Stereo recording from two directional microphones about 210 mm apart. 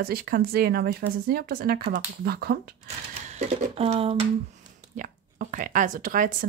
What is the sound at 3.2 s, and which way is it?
Speech, 35° right (ahead or behind).